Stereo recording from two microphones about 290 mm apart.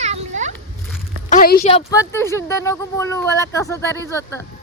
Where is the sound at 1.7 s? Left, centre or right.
Centre.